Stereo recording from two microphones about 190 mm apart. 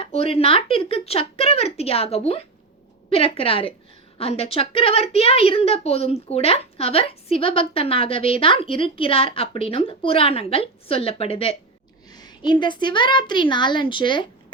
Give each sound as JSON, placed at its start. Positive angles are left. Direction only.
{"t": 0.0, "sound": "a woman's voice", "side_deg": 30}